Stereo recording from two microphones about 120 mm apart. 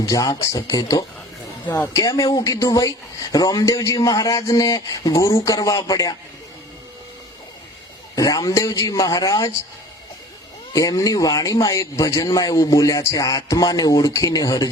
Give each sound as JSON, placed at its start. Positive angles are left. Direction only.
{"t": 0.0, "sound": "a man's voice", "side_deg": 30}
{"t": 1.6, "sound": "speech", "side_deg": 15}
{"t": 1.9, "sound": "a man's voice", "side_deg": 30}
{"t": 8.1, "sound": "speech", "side_deg": 30}
{"t": 10.7, "sound": "speech", "side_deg": 30}